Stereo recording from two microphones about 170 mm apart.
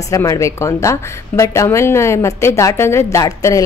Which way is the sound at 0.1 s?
20° left (ahead or behind).